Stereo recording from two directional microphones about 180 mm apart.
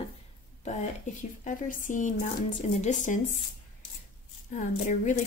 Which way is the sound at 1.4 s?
45° left (ahead or behind).